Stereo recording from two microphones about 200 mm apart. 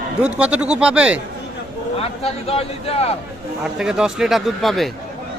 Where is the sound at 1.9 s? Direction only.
30° left (ahead or behind).